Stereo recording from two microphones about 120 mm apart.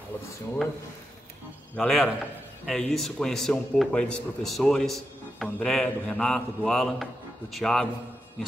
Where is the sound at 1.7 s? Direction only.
5° left (ahead or behind).